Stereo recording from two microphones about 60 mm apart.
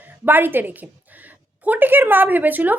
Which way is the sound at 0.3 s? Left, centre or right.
Right.